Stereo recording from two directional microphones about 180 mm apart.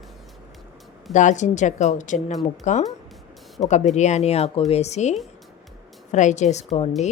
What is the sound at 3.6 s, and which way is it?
Speech, 20° left (ahead or behind).